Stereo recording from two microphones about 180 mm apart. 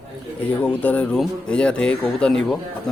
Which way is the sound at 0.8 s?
5° left (ahead or behind).